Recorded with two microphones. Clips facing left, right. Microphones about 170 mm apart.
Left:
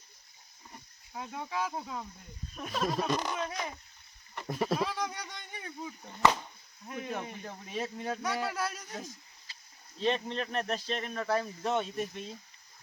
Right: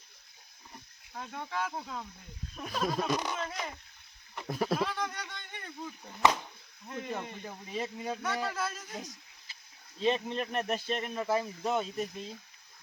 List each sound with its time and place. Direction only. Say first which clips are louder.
1.1 s a man's voice: left 1 dB; 5° left (ahead or behind)
8.9 s speech: even; 15° right (ahead or behind)